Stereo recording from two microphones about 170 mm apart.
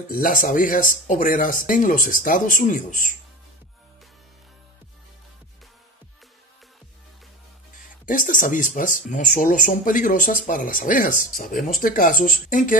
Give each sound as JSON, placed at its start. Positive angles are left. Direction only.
{"t": 0.1, "sound": "speech", "side_deg": 55}
{"t": 8.1, "sound": "speech", "side_deg": 50}